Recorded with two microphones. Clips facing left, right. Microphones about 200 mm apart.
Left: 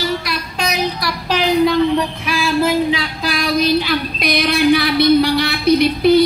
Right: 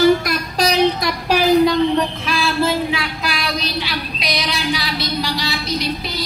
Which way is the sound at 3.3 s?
50° left (ahead or behind).